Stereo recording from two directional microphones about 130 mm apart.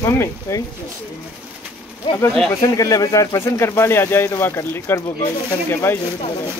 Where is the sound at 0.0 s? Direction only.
20° left (ahead or behind).